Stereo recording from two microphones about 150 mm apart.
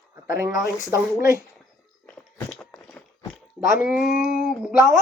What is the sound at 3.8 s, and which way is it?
Speech, 5° right (ahead or behind).